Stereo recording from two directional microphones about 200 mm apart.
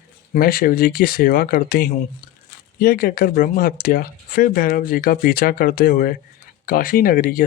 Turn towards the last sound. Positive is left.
turn(degrees=45)  # may be behind; listen again after turning